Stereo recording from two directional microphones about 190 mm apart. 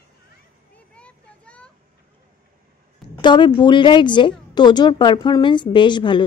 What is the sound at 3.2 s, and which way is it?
A woman's voice, 25° left (ahead or behind).